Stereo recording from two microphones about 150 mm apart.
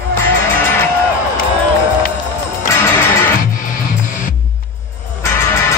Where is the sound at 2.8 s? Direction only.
15° left (ahead or behind).